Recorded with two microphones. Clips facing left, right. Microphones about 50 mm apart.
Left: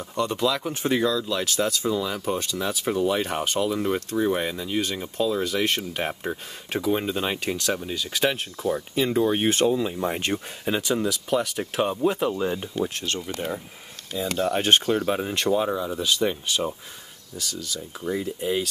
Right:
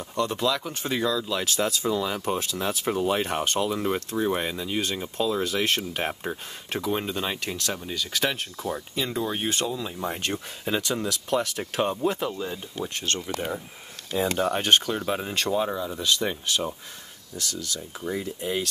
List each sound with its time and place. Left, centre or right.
0.0 s speech: centre
0.7 s speech: centre
1.0 s speech: centre
7.2 s speech: centre
8.9 s speech: centre
9.8 s speech: centre
12.3 s speech: left
12.7 s speech: centre
14.1 s speech: right
14.5 s speech: centre